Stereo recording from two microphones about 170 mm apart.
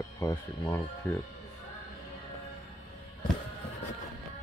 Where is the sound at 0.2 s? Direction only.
15° left (ahead or behind).